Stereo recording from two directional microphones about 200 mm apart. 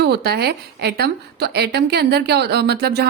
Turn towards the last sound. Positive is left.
turn(degrees=-55)  # may be behind; listen again after turning